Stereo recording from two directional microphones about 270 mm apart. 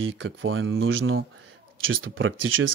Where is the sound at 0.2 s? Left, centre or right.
Right.